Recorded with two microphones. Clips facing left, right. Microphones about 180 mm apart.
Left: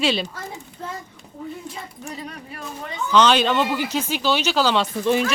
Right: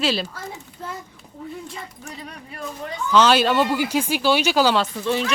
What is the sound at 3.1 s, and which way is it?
Speech, 5° right (ahead or behind).